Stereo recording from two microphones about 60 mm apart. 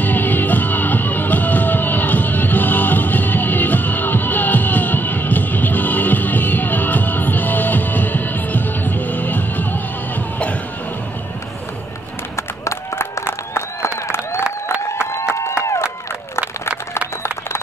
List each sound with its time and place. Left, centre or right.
0.0 s music: left
12.4 s run: left